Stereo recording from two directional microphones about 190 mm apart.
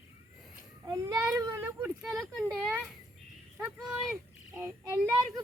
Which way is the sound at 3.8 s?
5° right (ahead or behind).